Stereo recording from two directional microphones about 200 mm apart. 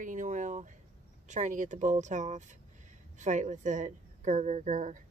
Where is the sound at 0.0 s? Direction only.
40° right (ahead or behind).